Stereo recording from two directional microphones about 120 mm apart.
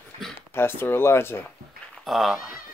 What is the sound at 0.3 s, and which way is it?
Speech, 20° left (ahead or behind).